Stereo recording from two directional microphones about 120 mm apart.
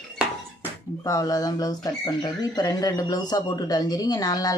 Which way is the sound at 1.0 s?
30° left (ahead or behind).